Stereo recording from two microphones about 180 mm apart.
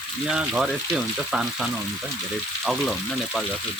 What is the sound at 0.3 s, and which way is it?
Speech, 5° right (ahead or behind).